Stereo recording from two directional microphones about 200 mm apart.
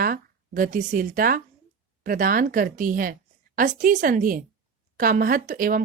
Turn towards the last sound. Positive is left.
turn(degrees=-45)  # may be behind; listen again after turning